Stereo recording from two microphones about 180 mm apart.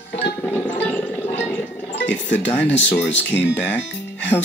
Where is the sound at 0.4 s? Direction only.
10° left (ahead or behind).